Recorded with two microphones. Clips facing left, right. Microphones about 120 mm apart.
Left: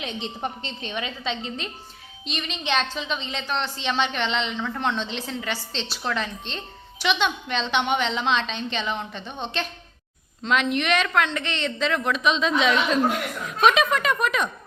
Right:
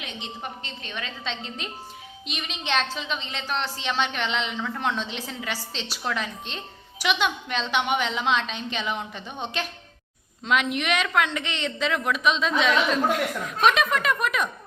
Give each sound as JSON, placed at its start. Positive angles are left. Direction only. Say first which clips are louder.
{"t": 0.0, "sound": "a woman's voice", "louder": "left 5 dB", "side_deg": 30}
{"t": 1.2, "sound": "a woman's voice", "louder": "left 4 dB", "side_deg": 5}